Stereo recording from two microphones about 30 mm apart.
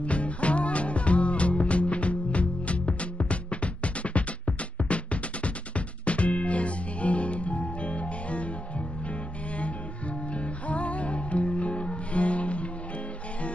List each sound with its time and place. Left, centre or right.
0.0 s music: left
10.3 s music: left